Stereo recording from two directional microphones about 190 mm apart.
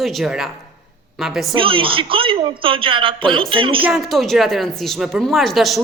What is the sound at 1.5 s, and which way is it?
A woman's voice, 25° right (ahead or behind).